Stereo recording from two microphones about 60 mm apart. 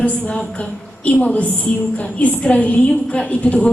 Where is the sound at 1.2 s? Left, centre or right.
Left.